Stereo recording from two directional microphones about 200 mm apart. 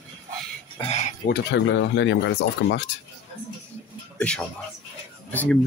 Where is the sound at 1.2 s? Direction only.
60° left (ahead or behind).